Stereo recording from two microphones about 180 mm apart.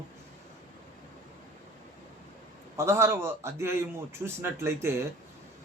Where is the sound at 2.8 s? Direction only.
15° right (ahead or behind).